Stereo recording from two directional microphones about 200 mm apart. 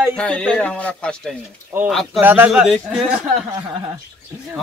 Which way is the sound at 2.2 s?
10° right (ahead or behind).